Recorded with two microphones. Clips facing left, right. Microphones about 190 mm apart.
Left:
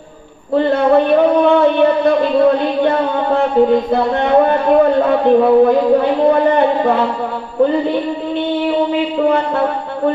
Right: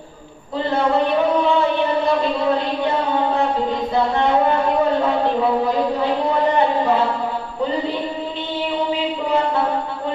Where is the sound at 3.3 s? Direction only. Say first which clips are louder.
Left 8 dB; 55° left (ahead or behind).